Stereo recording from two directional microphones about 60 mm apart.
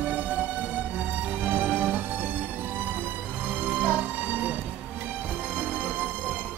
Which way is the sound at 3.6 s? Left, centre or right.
Right.